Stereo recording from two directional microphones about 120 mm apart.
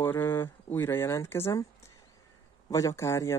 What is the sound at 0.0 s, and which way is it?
Speech, 20° left (ahead or behind).